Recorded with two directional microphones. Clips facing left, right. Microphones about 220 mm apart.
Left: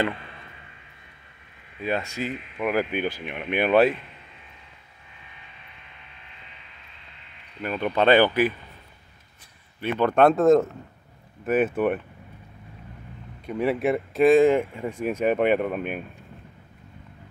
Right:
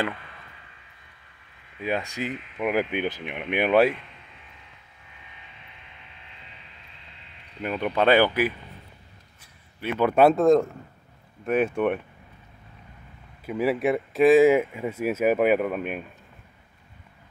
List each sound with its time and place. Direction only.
1.8 s speech: 15° right (ahead or behind)
7.6 s speech: 15° right (ahead or behind)
9.8 s speech: 5° right (ahead or behind)
13.5 s speech: centre (ahead or behind)